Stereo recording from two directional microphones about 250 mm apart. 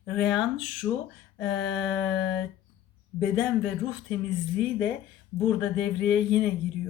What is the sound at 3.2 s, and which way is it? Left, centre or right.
Speech, centre.